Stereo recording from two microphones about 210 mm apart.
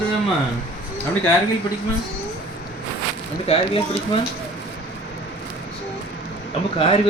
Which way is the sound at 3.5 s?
25° left (ahead or behind).